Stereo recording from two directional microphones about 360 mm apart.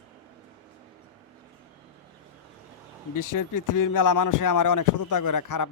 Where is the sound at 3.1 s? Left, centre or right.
Left.